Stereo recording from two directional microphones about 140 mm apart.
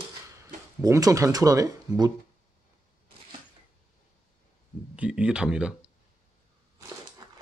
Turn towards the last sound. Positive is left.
turn(degrees=-5)  # may be behind; listen again after turning